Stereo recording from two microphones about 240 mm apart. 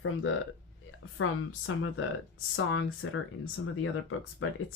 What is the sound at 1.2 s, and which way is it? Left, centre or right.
Speech, left.